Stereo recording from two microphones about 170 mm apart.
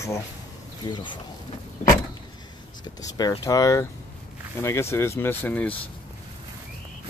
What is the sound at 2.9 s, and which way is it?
Speech, 20° left (ahead or behind).